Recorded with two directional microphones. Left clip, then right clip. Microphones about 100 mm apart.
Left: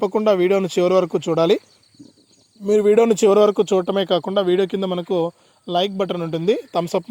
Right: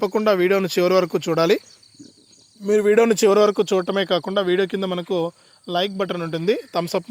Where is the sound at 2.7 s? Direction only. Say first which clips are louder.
Left 1 dB; 35° left (ahead or behind).